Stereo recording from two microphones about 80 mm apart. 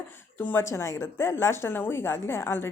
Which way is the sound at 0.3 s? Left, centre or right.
Left.